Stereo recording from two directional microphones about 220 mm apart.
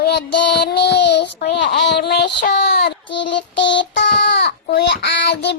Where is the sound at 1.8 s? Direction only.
50° left (ahead or behind).